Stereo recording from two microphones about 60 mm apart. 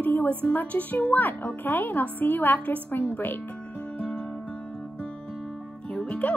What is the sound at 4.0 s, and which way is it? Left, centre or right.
Music, centre.